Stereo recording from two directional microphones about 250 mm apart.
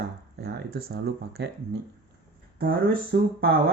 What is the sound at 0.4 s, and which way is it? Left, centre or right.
Speech, right.